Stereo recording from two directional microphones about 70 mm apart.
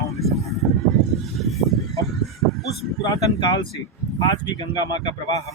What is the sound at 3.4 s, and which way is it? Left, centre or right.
Speech, left.